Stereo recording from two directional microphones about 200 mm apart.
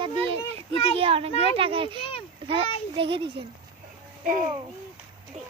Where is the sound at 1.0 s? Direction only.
30° right (ahead or behind).